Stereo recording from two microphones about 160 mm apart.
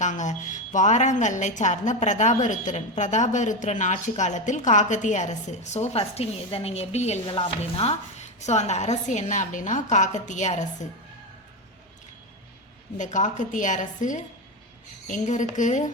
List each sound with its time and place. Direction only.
0.0 s a woman's voice: 50° left (ahead or behind)
13.0 s a woman's voice: 50° left (ahead or behind)